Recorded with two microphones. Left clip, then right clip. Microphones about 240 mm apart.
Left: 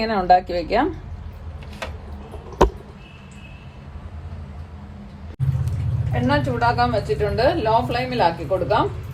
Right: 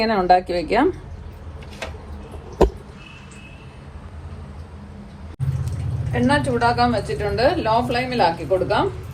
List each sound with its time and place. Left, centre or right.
0.0 s speech: right
6.1 s speech: right